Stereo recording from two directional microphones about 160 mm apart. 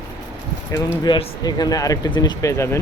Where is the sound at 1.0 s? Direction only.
25° left (ahead or behind).